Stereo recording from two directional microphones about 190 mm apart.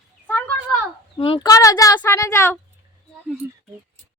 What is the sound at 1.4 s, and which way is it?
Speech, 15° left (ahead or behind).